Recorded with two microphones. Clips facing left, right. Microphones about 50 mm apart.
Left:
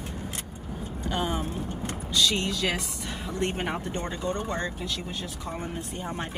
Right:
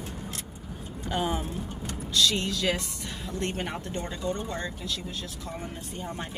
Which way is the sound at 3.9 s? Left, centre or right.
Left.